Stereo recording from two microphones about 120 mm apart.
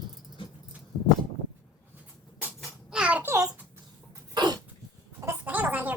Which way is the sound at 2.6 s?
10° right (ahead or behind).